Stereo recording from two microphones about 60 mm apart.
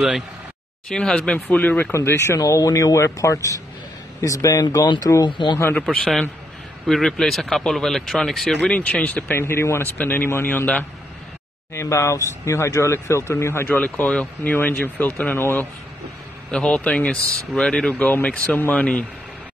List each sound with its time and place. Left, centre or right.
0.8 s a man's voice: centre
1.5 s speech: left
2.0 s speech: left
5.9 s speech: centre
8.5 s speech: centre
9.3 s speech: left
9.9 s speech: left
11.7 s speech: left
13.7 s a man's voice: left
14.5 s speech: left
16.4 s a man's voice: centre
17.9 s speech: left